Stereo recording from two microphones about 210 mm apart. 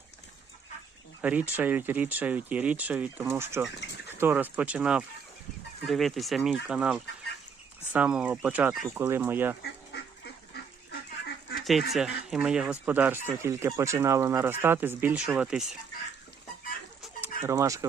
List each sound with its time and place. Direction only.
1.2 s speech: 5° right (ahead or behind)
9.6 s duck: 50° left (ahead or behind)
11.6 s speech: centre (ahead or behind)
17.4 s speech: 15° right (ahead or behind)